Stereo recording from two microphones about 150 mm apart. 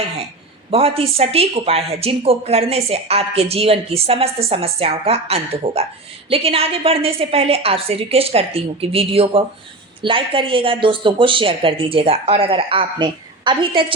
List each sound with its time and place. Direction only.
0.7 s a woman's voice: 40° right (ahead or behind)